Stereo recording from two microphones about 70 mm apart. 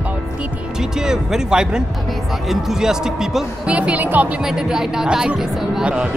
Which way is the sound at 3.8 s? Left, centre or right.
Right.